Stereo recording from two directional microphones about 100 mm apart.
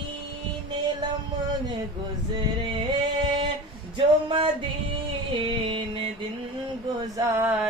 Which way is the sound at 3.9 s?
60° right (ahead or behind).